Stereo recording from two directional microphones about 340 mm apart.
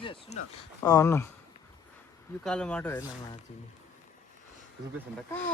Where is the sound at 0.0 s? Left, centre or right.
Centre.